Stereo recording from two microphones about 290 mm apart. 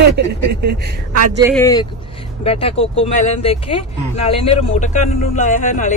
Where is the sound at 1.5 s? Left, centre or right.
Centre.